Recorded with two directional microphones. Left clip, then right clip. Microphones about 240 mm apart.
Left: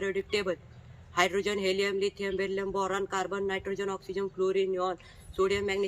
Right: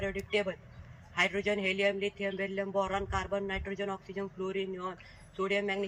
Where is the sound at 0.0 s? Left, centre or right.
Centre.